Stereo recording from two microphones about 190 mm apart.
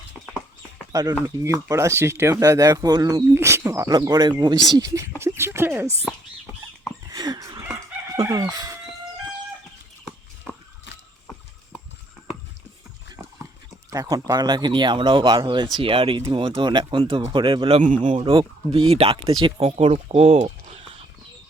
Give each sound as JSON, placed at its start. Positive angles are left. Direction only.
{"t": 0.9, "sound": "speech", "side_deg": -15}
{"t": 7.1, "sound": "a sound", "side_deg": -20}
{"t": 8.1, "sound": "chicken", "side_deg": -20}
{"t": 13.9, "sound": "speech", "side_deg": -20}
{"t": 17.8, "sound": "speech", "side_deg": -40}
{"t": 18.2, "sound": "speech", "side_deg": -25}